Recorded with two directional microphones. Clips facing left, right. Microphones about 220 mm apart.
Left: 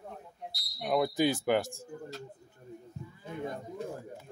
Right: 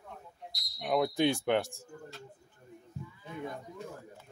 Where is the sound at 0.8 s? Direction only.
Centre (ahead or behind).